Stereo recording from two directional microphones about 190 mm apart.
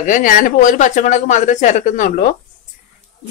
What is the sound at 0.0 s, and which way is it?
Speech, 45° left (ahead or behind).